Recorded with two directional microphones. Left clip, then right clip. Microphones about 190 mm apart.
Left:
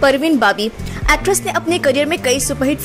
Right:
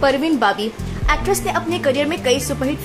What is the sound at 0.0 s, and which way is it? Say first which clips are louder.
Speech: left 3 dB; 25° left (ahead or behind).